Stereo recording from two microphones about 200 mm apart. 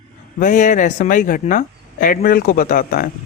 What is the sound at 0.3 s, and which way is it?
A woman's voice, 40° left (ahead or behind).